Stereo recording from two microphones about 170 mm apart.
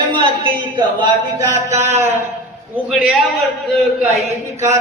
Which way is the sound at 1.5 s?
15° right (ahead or behind).